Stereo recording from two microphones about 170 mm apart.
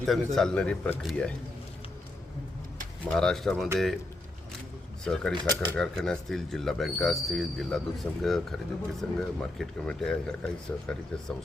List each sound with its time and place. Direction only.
0.3 s speech: 5° left (ahead or behind)
3.0 s speech: 5° left (ahead or behind)
5.0 s speech: 5° left (ahead or behind)
5.3 s speech: 25° right (ahead or behind)
5.5 s speech: 5° left (ahead or behind)